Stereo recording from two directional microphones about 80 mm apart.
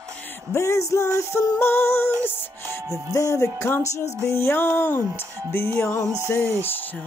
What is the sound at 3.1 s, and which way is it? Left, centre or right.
Music, left.